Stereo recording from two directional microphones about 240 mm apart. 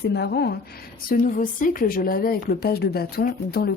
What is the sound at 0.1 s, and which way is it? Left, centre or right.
A woman's voice, left.